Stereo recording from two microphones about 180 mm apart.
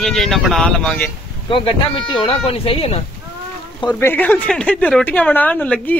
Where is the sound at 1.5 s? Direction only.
30° left (ahead or behind).